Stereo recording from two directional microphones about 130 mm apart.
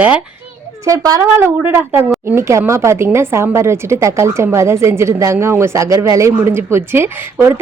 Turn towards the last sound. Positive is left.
turn(degrees=-20)  # may be behind; listen again after turning